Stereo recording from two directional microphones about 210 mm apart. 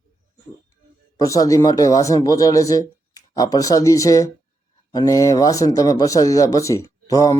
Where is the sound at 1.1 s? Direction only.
15° left (ahead or behind).